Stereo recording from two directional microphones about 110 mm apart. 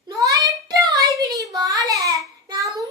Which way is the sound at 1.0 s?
30° right (ahead or behind).